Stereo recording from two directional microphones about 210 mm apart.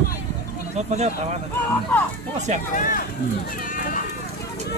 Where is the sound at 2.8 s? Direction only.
40° left (ahead or behind).